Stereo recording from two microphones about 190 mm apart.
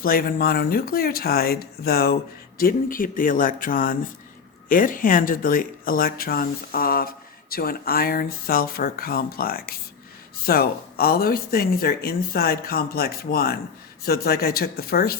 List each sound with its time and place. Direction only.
0.0 s speech: 50° left (ahead or behind)